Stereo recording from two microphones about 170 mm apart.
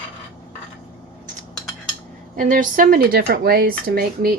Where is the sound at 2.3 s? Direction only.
50° right (ahead or behind).